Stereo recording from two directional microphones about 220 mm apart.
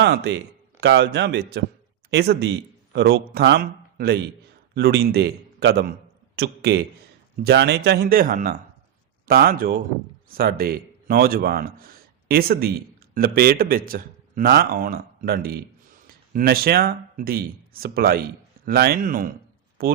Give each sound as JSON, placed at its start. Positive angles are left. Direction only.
{"t": 0.0, "sound": "a man's voice", "side_deg": -50}